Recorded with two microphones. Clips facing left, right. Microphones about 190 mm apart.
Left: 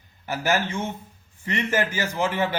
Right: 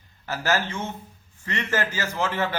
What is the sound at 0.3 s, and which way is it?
Speech, 15° left (ahead or behind).